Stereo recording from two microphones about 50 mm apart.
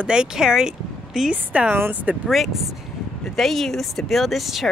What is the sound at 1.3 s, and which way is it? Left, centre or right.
Speech, right.